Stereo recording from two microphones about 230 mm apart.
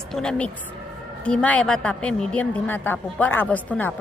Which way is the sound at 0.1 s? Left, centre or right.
Centre.